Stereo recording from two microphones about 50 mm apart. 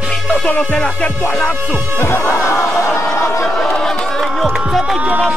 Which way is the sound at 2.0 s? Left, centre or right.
Left.